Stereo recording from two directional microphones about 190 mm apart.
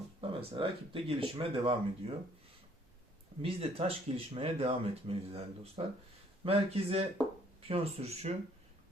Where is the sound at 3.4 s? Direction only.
30° right (ahead or behind).